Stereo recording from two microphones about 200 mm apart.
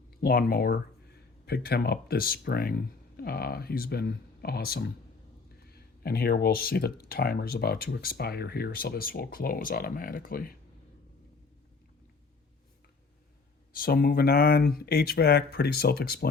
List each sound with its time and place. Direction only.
0.2 s speech: 50° left (ahead or behind)
13.7 s speech: 45° left (ahead or behind)